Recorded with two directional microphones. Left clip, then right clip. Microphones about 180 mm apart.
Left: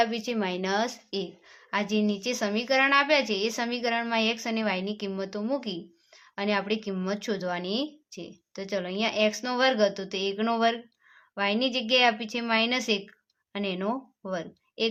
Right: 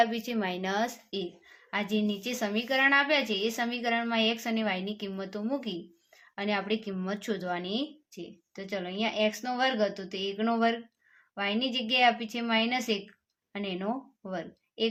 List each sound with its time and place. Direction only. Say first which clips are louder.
0.0 s a woman's voice: left 1 dB; 30° left (ahead or behind)